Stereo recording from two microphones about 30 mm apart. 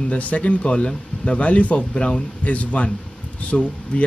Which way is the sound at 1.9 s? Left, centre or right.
Left.